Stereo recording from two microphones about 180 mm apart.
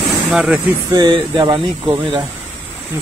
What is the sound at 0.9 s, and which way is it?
Speech, 25° right (ahead or behind).